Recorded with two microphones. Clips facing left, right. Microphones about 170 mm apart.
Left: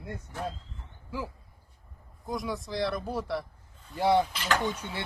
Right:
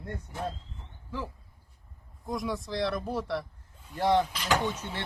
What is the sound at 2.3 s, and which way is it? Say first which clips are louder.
Speech: right 1 dB; centre (ahead or behind).